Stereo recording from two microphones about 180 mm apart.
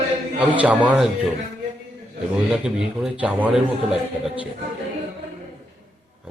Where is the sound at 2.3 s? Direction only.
5° right (ahead or behind).